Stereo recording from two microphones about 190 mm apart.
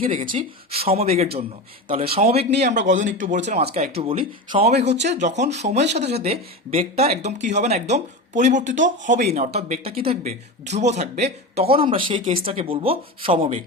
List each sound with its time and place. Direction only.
0.0 s speech: 30° right (ahead or behind)